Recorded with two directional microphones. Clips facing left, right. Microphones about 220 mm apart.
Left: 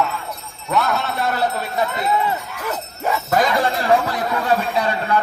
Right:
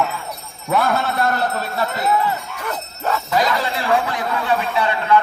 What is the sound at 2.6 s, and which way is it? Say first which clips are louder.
Jingle bell: left 1 dB; 10° left (ahead or behind).